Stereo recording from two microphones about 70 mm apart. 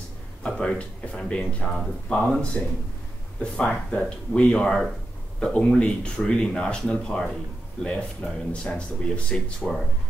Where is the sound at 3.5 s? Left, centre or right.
Centre.